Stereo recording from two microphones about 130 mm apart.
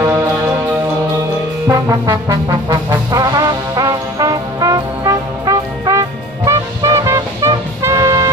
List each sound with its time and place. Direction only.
1.7 s brass instrument: 25° right (ahead or behind)